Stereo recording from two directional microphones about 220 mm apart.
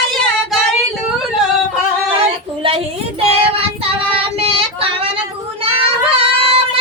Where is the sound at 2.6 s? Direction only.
25° right (ahead or behind).